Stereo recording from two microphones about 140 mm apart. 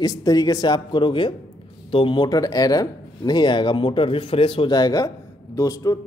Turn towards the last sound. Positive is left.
turn(degrees=25)  # may be behind; listen again after turning